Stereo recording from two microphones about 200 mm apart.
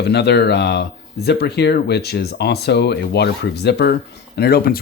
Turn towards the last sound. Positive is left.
turn(degrees=50)  # may be behind; listen again after turning